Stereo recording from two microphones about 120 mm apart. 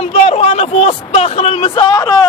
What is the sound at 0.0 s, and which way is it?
A man's voice, 55° left (ahead or behind).